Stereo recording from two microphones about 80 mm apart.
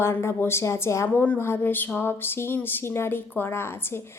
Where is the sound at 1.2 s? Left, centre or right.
Left.